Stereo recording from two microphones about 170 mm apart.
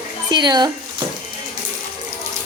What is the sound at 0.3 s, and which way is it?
Speech, 25° right (ahead or behind).